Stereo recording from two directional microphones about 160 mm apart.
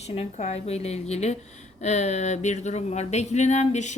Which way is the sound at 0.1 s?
40° left (ahead or behind).